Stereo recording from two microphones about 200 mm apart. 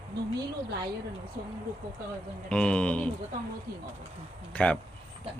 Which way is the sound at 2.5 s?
5° left (ahead or behind).